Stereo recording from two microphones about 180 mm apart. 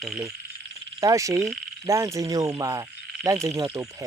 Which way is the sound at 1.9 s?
15° right (ahead or behind).